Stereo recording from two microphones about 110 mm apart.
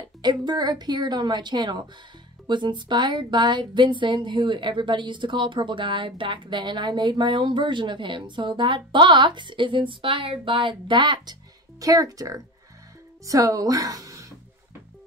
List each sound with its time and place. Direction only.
0.2 s a woman's voice: 40° right (ahead or behind)
11.8 s a woman's voice: 30° right (ahead or behind)